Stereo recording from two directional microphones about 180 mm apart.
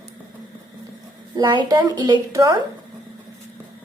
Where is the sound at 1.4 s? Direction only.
25° right (ahead or behind).